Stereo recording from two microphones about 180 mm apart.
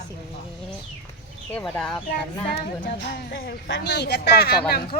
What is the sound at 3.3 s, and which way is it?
Speech, 60° left (ahead or behind).